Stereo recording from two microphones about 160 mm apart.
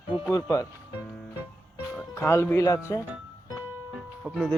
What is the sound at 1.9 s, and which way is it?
Speech, 15° left (ahead or behind).